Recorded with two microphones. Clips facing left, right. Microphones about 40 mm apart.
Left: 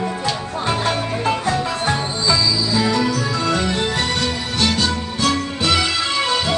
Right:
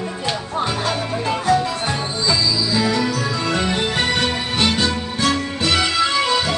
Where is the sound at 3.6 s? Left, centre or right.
Centre.